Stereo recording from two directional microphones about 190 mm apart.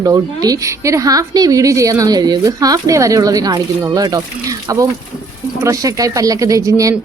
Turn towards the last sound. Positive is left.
turn(degrees=-15)  # may be behind; listen again after turning